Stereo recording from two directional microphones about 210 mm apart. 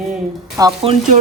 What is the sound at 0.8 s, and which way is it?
Stir, 25° right (ahead or behind).